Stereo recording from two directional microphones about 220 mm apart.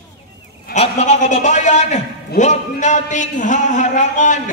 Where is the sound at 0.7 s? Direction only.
30° left (ahead or behind).